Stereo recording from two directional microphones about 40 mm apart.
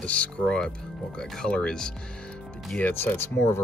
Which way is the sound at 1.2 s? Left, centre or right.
Centre.